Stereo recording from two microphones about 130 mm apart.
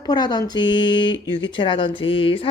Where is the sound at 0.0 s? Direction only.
35° left (ahead or behind).